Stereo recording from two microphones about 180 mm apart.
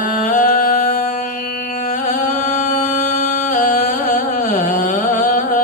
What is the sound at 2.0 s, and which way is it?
Music, 50° left (ahead or behind).